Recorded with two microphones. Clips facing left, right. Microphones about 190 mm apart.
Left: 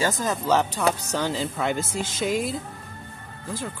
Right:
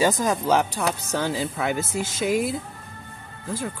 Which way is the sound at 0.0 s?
15° right (ahead or behind).